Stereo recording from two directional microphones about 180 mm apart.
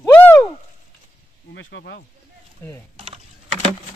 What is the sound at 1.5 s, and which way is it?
Speech, 90° left.